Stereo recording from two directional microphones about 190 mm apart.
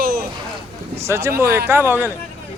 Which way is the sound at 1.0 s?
15° right (ahead or behind).